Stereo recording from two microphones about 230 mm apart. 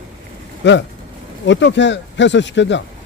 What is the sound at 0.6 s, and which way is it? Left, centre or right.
A man's voice, left.